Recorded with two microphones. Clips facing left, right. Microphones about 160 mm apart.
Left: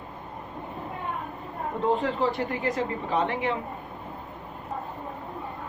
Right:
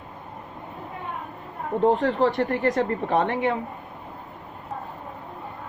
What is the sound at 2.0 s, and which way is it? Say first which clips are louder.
Speech: right 5 dB; 65° right (ahead or behind).